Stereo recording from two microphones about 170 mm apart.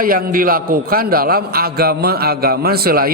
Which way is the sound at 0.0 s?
55° right (ahead or behind).